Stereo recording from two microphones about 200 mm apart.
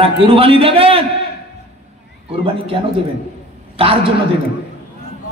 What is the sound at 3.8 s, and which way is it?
Speech, 30° right (ahead or behind).